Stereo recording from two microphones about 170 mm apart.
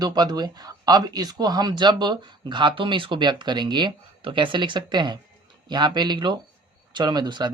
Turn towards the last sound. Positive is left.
turn(degrees=-25)  # may be behind; listen again after turning